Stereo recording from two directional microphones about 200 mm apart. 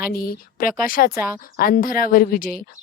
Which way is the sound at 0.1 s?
45° left (ahead or behind).